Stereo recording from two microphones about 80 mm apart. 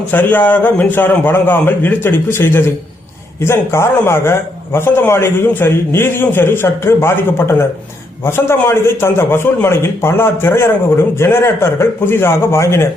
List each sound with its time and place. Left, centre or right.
0.1 s a man's voice: left